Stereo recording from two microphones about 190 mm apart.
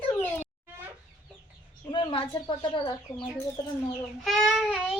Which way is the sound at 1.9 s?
25° left (ahead or behind).